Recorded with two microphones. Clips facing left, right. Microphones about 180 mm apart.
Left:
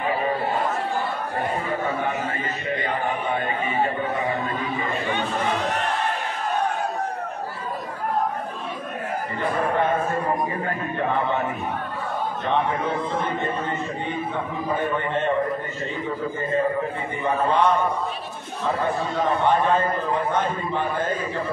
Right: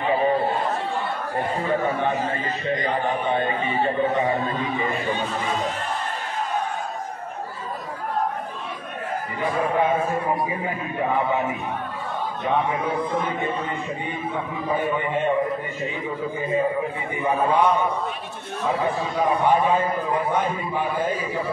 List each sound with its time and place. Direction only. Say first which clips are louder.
5.1 s speech: left 1 dB; 70° left (ahead or behind)
9.4 s a man's voice: right 1 dB; 5° right (ahead or behind)
14.8 s a man's voice: right 1 dB; 10° right (ahead or behind)
16.3 s a man's voice: right 1 dB; 5° right (ahead or behind)
18.8 s a man's voice: even; 10° right (ahead or behind)